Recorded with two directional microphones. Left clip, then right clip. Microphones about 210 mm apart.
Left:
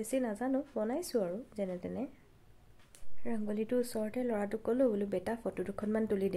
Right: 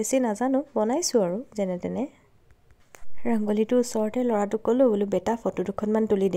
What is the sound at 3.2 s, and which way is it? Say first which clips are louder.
Speech: right 12 dB; 40° right (ahead or behind).